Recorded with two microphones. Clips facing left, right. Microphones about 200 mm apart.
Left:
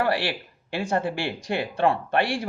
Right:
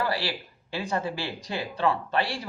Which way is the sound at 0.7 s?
60° left (ahead or behind).